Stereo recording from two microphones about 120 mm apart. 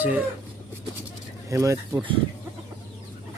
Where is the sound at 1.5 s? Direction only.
25° right (ahead or behind).